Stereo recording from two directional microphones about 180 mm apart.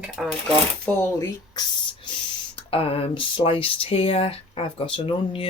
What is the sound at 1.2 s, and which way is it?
Speech, 25° left (ahead or behind).